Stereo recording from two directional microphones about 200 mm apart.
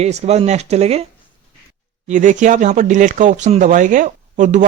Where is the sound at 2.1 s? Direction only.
40° right (ahead or behind).